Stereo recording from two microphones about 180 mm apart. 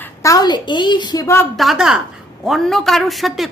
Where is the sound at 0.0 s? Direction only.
15° left (ahead or behind).